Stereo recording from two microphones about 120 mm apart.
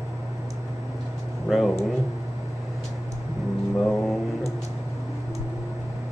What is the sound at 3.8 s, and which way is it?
Mantra, 5° left (ahead or behind).